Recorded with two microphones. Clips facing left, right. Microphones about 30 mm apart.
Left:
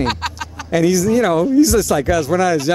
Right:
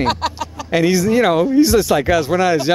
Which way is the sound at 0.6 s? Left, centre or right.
Right.